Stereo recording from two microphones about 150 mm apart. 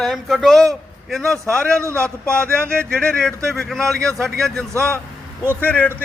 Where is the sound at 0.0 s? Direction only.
Centre (ahead or behind).